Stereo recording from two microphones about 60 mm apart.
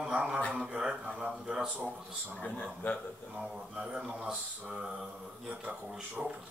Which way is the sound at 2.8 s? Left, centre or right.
Left.